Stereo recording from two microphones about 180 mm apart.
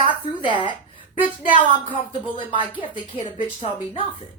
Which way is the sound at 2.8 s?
35° left (ahead or behind).